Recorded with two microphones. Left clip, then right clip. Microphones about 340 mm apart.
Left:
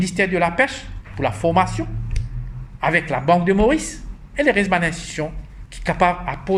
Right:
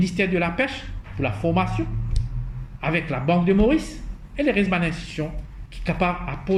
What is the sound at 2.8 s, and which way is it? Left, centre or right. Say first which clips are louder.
A woman's voice: left 6 dB; left.